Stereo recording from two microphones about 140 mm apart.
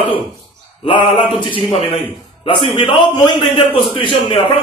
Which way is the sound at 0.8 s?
35° left (ahead or behind).